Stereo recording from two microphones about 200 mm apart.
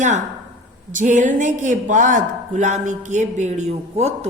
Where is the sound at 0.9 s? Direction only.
40° right (ahead or behind).